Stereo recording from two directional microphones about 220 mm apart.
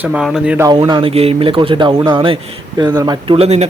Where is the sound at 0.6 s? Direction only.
20° right (ahead or behind).